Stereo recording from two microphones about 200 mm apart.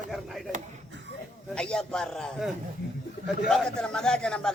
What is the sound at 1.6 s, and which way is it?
Speech, 5° left (ahead or behind).